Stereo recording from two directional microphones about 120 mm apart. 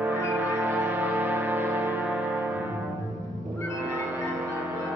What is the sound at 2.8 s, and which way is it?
Music, centre (ahead or behind).